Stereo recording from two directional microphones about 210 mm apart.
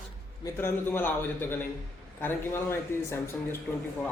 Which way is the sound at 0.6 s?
10° left (ahead or behind).